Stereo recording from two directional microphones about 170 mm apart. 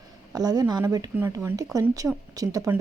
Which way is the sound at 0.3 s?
20° right (ahead or behind).